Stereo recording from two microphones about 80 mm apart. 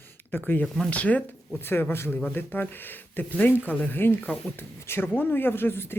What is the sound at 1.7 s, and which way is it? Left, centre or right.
Speech, left.